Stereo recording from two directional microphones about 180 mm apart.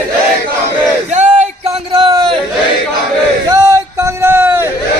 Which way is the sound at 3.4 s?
20° right (ahead or behind).